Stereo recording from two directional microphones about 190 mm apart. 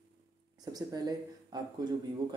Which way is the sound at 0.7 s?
20° right (ahead or behind).